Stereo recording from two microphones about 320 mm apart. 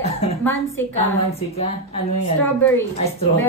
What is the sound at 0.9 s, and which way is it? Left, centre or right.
Speech, centre.